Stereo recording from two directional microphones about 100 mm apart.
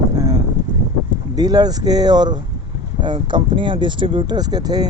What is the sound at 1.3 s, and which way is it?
Speech, 40° right (ahead or behind).